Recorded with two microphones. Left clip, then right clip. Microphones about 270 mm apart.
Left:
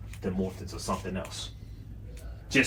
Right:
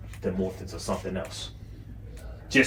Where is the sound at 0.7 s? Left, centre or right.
Centre.